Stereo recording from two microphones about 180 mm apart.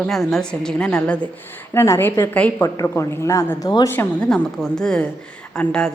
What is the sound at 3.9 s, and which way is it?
A woman's voice, 10° left (ahead or behind).